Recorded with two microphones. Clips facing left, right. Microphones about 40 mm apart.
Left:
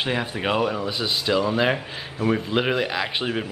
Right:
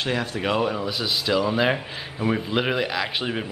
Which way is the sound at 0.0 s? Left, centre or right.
Centre.